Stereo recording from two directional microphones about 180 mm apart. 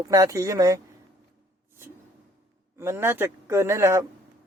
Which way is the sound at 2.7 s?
15° right (ahead or behind).